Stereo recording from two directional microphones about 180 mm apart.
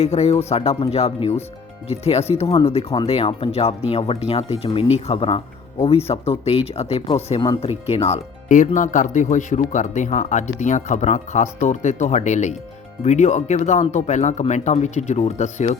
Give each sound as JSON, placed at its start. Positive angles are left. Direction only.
{"t": 0.0, "sound": "speech", "side_deg": 35}